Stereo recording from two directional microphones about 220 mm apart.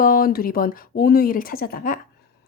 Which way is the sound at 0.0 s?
40° left (ahead or behind).